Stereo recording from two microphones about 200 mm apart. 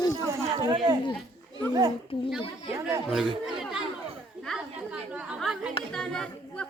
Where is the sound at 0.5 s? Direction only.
20° right (ahead or behind).